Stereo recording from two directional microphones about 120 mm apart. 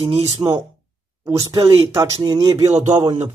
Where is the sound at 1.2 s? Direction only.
25° right (ahead or behind).